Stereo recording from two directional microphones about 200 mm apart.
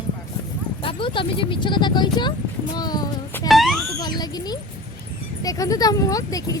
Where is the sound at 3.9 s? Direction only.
20° left (ahead or behind).